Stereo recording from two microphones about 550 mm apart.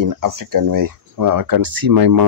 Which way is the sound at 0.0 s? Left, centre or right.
Right.